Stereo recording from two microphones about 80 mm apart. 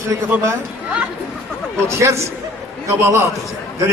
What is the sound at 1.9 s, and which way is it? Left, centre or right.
A man's voice, right.